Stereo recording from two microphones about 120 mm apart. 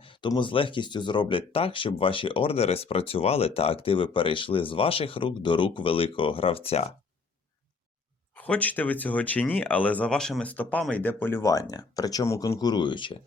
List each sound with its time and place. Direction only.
0.0 s speech: 40° left (ahead or behind)
8.4 s speech: 15° left (ahead or behind)
12.5 s speech: 35° left (ahead or behind)